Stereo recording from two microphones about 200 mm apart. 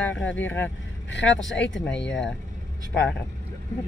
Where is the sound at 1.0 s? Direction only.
60° left (ahead or behind).